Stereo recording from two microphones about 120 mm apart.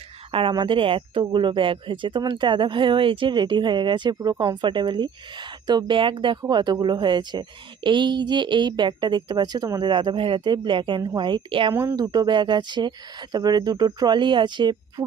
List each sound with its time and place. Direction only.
0.3 s speech: 50° right (ahead or behind); by 9.9 s 30° right (ahead or behind)
9.9 s speech: 40° right (ahead or behind)
11.7 s speech: 20° right (ahead or behind)
11.9 s speech: 35° right (ahead or behind)